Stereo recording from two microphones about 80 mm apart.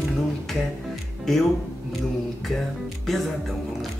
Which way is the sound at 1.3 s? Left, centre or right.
Centre.